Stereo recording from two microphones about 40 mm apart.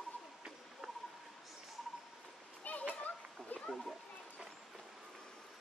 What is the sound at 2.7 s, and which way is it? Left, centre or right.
Children playing, left.